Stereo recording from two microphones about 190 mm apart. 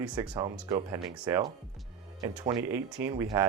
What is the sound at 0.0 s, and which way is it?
Speech, 5° right (ahead or behind).